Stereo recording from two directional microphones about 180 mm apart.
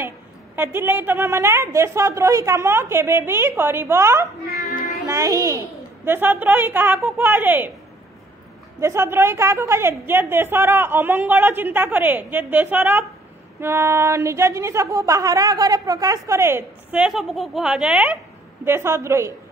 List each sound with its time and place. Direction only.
0.6 s a woman's voice: 10° right (ahead or behind)
8.7 s a woman's voice: 15° right (ahead or behind)